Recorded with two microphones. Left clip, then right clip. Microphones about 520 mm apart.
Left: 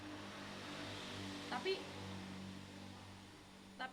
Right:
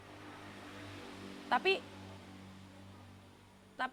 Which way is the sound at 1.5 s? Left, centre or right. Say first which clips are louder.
Right 13 dB; right.